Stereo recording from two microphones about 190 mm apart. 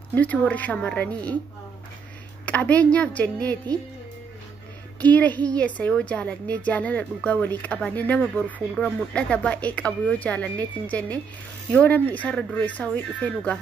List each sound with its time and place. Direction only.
0.1 s a woman's voice: 10° left (ahead or behind)
2.4 s a woman's voice: 5° left (ahead or behind)
5.0 s a woman's voice: 10° left (ahead or behind)